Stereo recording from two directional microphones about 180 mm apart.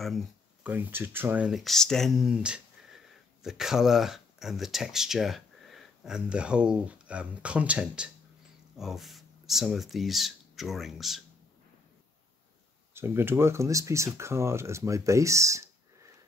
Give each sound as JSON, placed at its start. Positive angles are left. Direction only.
{"t": 0.0, "sound": "a sound", "side_deg": 0}
{"t": 0.7, "sound": "speech", "side_deg": -10}
{"t": 12.9, "sound": "speech", "side_deg": -15}